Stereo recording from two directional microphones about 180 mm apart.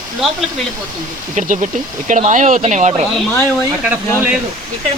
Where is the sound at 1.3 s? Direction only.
45° right (ahead or behind).